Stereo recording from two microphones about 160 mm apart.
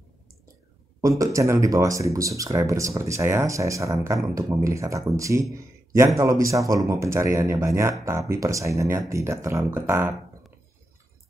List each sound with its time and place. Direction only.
1.0 s speech: 20° right (ahead or behind)